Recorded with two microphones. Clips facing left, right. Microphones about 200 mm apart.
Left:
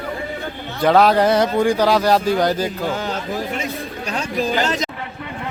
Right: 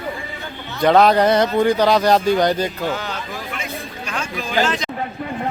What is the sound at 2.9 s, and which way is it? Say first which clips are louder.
Chatter: left 4 dB; 45° left (ahead or behind).